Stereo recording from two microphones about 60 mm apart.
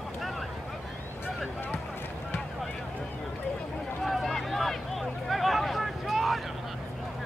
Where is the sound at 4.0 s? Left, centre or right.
Centre.